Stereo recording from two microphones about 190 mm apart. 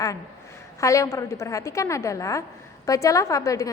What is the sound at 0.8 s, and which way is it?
A woman's voice, 15° left (ahead or behind).